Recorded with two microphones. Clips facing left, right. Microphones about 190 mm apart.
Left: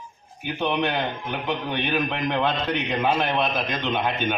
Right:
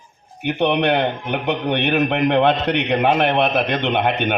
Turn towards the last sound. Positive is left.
turn(degrees=-70)  # may be behind; listen again after turning